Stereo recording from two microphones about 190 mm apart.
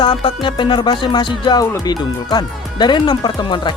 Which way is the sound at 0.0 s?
25° left (ahead or behind).